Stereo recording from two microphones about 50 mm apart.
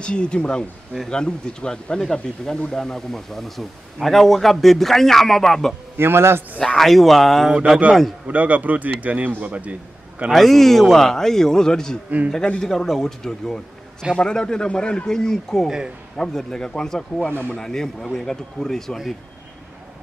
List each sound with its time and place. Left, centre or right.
0.0 s speech: centre
5.9 s a man's voice: right
6.8 s speech: centre
8.3 s a man's voice: right
10.3 s a man's voice: centre